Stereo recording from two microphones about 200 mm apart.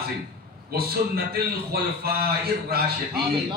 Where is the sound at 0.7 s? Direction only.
50° right (ahead or behind).